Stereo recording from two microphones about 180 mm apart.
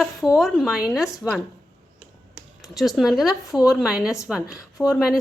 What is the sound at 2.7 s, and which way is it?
A woman's voice, centre (ahead or behind).